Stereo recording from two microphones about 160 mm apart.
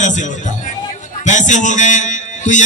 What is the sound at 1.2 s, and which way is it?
A man's voice, 50° left (ahead or behind).